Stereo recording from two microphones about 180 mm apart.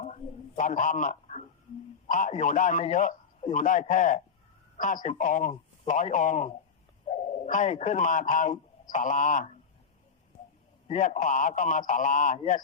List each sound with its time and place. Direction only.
0.0 s a sound: 40° left (ahead or behind)
2.0 s a man's voice: 45° left (ahead or behind)
10.8 s a man's voice: 45° left (ahead or behind)